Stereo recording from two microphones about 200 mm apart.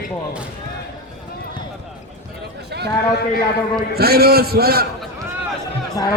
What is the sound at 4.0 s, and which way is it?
Music, 50° right (ahead or behind).